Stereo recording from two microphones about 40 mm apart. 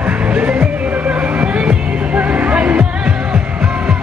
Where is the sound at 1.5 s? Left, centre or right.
Right.